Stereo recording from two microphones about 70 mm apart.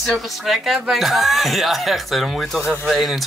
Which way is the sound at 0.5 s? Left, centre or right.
Centre.